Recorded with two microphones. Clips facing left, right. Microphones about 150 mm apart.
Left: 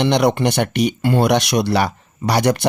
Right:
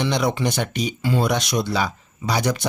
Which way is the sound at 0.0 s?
65° left (ahead or behind).